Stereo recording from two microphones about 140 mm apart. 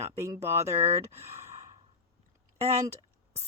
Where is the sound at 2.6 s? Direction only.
45° right (ahead or behind).